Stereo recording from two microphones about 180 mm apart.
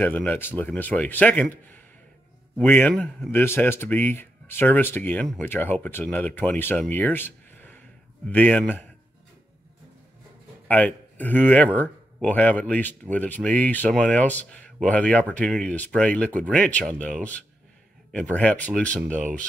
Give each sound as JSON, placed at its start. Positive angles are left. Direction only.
{"t": 0.0, "sound": "speech", "side_deg": 10}
{"t": 10.7, "sound": "speech", "side_deg": 10}
{"t": 19.1, "sound": "speech", "side_deg": -45}